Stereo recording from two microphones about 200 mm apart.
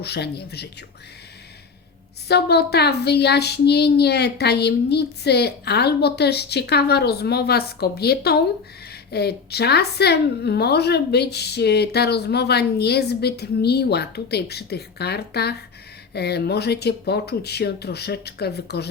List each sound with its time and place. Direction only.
0.0 s a woman's voice: 55° left (ahead or behind)
2.2 s a woman's voice: 55° left (ahead or behind)